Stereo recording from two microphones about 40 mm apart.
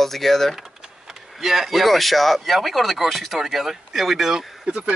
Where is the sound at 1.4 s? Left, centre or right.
Centre.